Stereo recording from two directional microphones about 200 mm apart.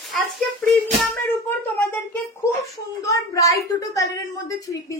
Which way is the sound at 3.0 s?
15° left (ahead or behind).